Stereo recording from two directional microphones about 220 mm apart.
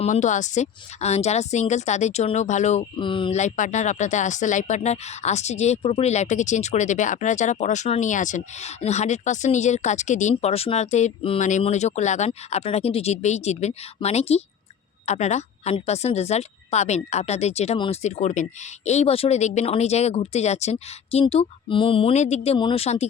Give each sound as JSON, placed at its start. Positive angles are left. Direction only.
{"t": 0.0, "sound": "speech", "side_deg": 35}